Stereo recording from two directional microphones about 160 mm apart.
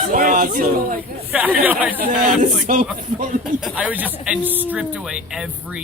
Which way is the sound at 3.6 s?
5° right (ahead or behind).